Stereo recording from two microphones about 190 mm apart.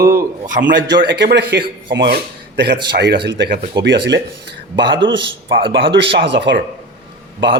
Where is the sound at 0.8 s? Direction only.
70° right (ahead or behind).